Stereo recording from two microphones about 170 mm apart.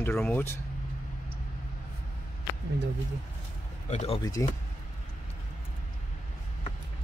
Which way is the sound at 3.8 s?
40° left (ahead or behind).